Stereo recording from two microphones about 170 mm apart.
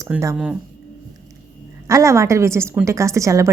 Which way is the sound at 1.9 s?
20° right (ahead or behind).